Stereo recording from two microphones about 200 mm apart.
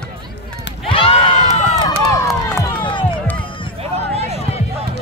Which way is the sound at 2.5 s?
25° left (ahead or behind).